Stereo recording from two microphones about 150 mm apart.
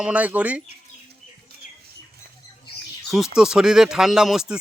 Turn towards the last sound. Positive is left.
turn(degrees=-5)  # may be behind; listen again after turning